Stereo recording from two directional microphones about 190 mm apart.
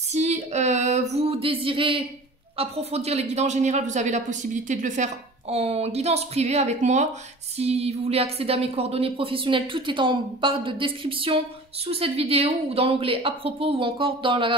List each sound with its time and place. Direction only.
0.1 s a man's voice: 35° right (ahead or behind)